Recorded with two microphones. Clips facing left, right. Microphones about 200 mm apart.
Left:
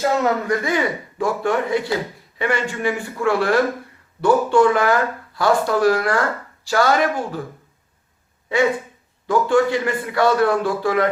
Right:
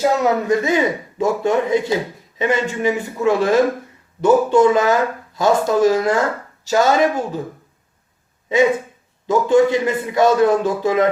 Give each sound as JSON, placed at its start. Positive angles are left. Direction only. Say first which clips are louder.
{"t": 0.0, "sound": "speech", "louder": "right 2 dB", "side_deg": -15}
{"t": 9.2, "sound": "speech", "louder": "right 3 dB", "side_deg": -20}